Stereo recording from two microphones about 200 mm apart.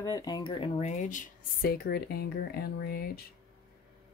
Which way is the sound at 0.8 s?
35° left (ahead or behind).